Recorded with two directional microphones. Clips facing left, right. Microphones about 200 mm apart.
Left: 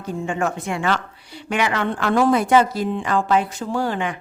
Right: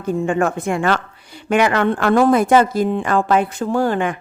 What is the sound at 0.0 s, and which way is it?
Speech, 55° right (ahead or behind).